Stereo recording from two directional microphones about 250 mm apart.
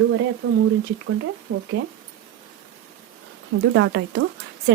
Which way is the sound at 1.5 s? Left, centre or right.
Right.